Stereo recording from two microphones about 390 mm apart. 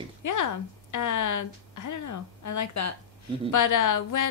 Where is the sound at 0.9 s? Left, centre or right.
Left.